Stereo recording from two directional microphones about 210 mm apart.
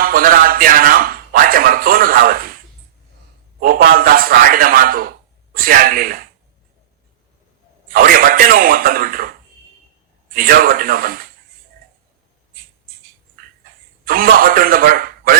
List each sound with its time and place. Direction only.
0.0 s a sound: 45° right (ahead or behind)
3.6 s a man's voice: 45° right (ahead or behind)
7.9 s a man's voice: 45° right (ahead or behind)
10.3 s a man's voice: 45° right (ahead or behind)
14.0 s a man's voice: 45° right (ahead or behind)